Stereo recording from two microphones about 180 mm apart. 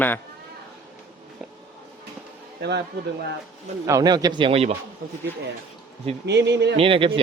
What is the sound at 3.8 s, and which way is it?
Speech, 20° right (ahead or behind).